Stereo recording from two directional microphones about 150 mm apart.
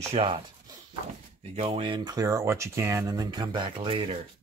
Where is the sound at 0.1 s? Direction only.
40° right (ahead or behind).